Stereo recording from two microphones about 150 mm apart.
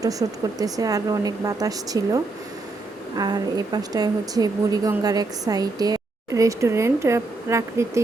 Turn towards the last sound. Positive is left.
turn(degrees=-20)  # may be behind; listen again after turning